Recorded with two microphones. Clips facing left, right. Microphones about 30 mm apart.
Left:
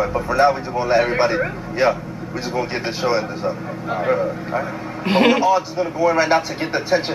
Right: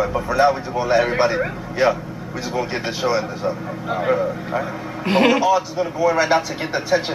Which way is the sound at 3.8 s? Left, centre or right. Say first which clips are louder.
Even; centre.